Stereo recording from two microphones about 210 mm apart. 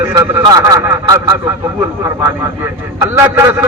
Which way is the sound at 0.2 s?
15° right (ahead or behind).